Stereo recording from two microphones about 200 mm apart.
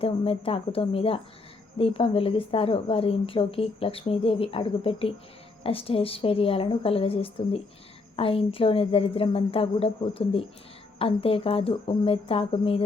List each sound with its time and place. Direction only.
0.0 s a woman's voice: 30° left (ahead or behind)